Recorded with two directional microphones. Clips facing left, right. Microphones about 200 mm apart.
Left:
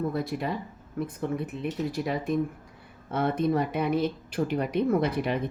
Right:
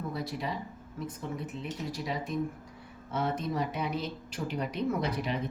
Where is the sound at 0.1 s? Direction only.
55° left (ahead or behind).